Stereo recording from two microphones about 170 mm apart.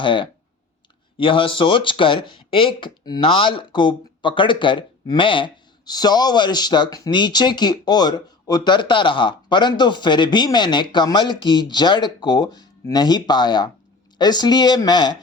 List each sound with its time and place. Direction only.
0.0 s speech: 30° left (ahead or behind)